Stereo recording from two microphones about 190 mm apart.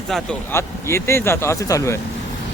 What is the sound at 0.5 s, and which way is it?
Speech, 15° left (ahead or behind).